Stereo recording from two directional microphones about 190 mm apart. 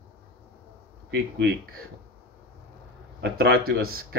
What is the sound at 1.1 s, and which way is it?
Speech, 60° right (ahead or behind).